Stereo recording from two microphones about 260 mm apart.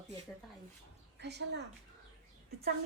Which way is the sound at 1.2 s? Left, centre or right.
Right.